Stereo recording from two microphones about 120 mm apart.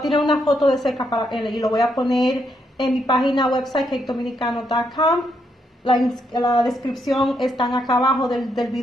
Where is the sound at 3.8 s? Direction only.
Centre (ahead or behind).